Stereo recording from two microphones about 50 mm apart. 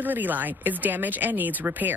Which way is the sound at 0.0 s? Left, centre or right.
Right.